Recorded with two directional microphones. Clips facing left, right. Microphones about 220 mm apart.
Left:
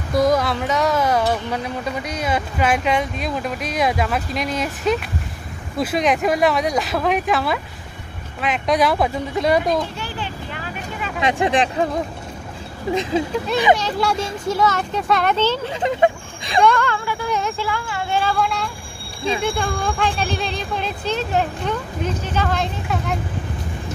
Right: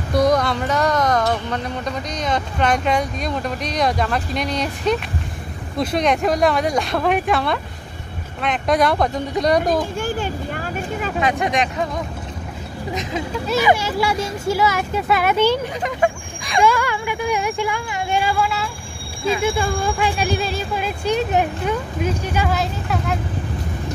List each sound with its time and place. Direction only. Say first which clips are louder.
0.1 s speech: even; centre (ahead or behind)
9.9 s speech: right 6 dB; 45° right (ahead or behind)
11.1 s speech: left 2 dB; 25° left (ahead or behind)
13.1 s speech: left 5 dB; 30° left (ahead or behind)
13.7 s speech: even; 5° right (ahead or behind)
15.8 s speech: left 3 dB; 25° left (ahead or behind)
16.6 s speech: even; 10° right (ahead or behind)